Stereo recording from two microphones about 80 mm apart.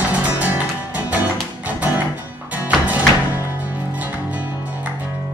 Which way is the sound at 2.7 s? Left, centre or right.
Centre.